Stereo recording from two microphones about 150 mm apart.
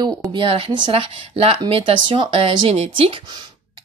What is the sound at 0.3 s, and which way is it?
A woman's voice, 35° right (ahead or behind).